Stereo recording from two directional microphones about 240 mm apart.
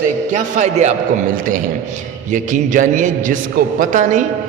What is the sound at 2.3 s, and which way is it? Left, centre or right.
A man's voice, right.